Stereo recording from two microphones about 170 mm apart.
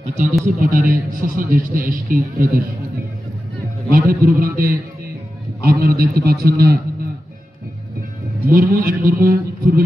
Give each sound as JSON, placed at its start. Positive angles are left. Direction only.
{"t": 0.0, "sound": "a man's voice", "side_deg": -45}
{"t": 4.1, "sound": "a man's voice", "side_deg": -60}
{"t": 8.5, "sound": "a man's voice", "side_deg": -60}